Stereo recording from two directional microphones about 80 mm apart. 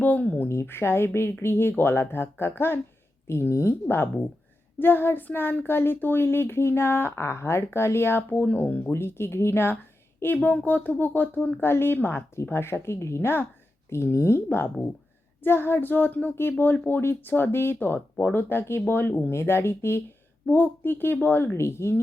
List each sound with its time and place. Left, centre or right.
0.0 s speech: left
10.3 s speech: centre